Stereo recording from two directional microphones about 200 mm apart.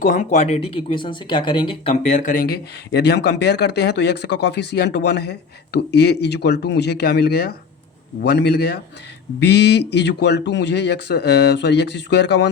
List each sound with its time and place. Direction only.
0.0 s a man's voice: 40° left (ahead or behind); by 12.5 s 60° left (ahead or behind)